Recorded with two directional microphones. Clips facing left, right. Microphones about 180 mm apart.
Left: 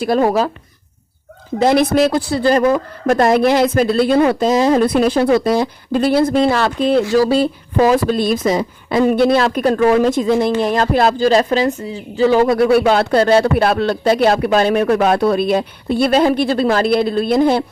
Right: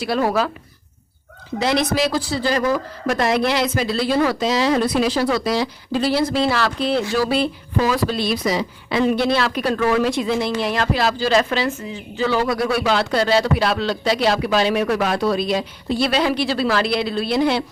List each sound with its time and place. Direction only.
0.0 s speech: 45° left (ahead or behind)
1.6 s a woman's voice: 55° left (ahead or behind)
12.8 s speech: 55° left (ahead or behind)